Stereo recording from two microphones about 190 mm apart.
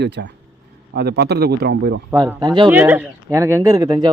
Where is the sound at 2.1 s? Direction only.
20° right (ahead or behind).